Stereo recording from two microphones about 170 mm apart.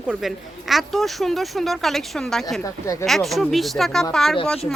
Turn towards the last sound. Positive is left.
turn(degrees=5)  # may be behind; listen again after turning